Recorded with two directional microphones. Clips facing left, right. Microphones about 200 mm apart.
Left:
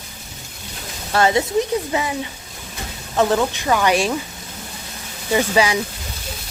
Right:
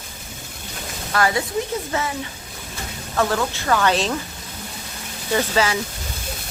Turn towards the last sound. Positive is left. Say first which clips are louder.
# left 3 dB
turn(degrees=15)  # may be behind; listen again after turning